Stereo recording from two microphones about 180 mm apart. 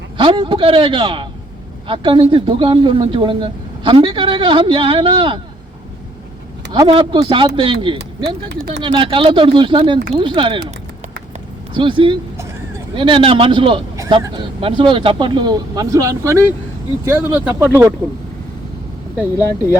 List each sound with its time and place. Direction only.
0.2 s a man's voice: 30° right (ahead or behind)
6.8 s a man's voice: 25° right (ahead or behind)
11.7 s a man's voice: 30° right (ahead or behind)